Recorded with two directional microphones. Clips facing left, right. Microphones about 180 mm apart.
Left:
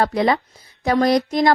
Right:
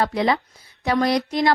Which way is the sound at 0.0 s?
45° left (ahead or behind).